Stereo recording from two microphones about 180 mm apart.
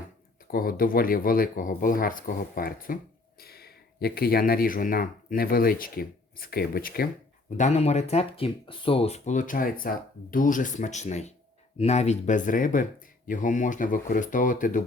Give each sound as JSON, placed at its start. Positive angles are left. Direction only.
{"t": 0.5, "sound": "speech", "side_deg": 55}
{"t": 7.5, "sound": "speech", "side_deg": 40}